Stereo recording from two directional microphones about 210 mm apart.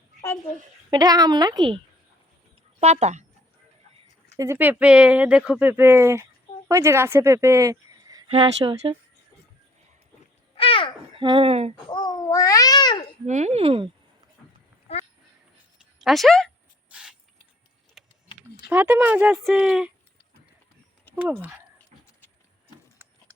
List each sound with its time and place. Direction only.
0.9 s a woman's voice: 20° right (ahead or behind)
2.8 s speech: 30° right (ahead or behind)
4.4 s a woman's voice: 10° right (ahead or behind)
8.3 s a woman's voice: 25° right (ahead or behind)
10.6 s babbling: 25° left (ahead or behind)
11.1 s a child's voice: 25° right (ahead or behind)
11.9 s cat: 20° left (ahead or behind)
13.2 s a woman's voice: 35° right (ahead or behind)
14.9 s quack: 30° left (ahead or behind)
16.0 s speech: centre (ahead or behind)
16.9 s mechanisms: 5° right (ahead or behind)
18.0 s printer: centre (ahead or behind)
18.7 s speech: 10° right (ahead or behind)